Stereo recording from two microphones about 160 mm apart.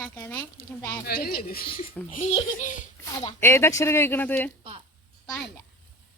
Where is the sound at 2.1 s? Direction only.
40° left (ahead or behind).